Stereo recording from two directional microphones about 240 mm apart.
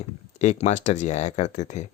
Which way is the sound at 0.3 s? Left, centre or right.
Left.